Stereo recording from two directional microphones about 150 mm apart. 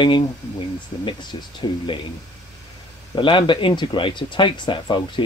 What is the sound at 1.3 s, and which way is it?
Speech, 30° left (ahead or behind).